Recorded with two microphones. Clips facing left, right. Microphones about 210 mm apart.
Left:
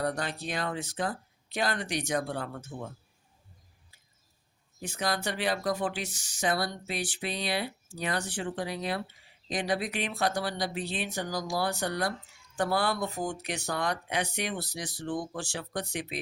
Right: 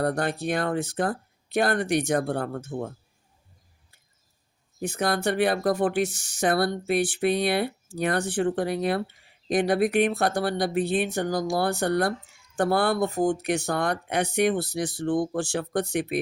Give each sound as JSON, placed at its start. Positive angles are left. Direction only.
{"t": 0.0, "sound": "speech", "side_deg": -55}
{"t": 4.8, "sound": "speech", "side_deg": -50}